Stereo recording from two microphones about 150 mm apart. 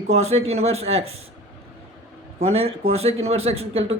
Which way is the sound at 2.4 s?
40° right (ahead or behind).